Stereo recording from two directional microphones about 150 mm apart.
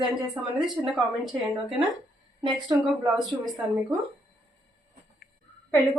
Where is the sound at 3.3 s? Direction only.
25° right (ahead or behind).